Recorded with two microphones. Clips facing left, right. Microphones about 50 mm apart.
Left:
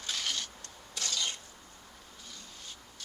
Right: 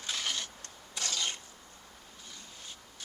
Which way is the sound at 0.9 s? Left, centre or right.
Right.